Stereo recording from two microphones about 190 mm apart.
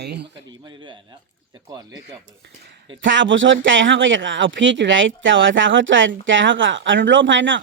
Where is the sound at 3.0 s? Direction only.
80° right.